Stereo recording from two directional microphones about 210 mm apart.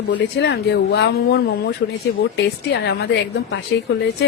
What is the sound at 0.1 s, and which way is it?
Speech, 55° left (ahead or behind).